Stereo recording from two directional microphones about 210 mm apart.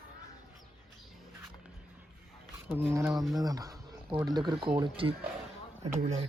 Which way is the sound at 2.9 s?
15° right (ahead or behind).